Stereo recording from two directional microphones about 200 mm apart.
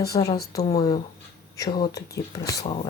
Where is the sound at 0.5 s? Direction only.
15° left (ahead or behind).